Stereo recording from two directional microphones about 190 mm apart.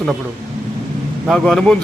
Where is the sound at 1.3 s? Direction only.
Centre (ahead or behind).